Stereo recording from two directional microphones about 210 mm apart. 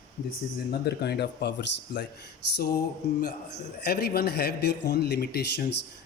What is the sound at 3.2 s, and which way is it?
A man's voice, 50° left (ahead or behind).